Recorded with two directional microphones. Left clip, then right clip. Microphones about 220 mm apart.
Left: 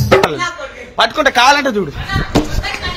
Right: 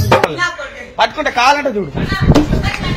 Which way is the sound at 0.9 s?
35° left (ahead or behind).